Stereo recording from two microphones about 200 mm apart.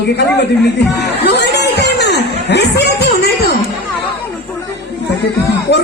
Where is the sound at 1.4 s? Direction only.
55° left (ahead or behind).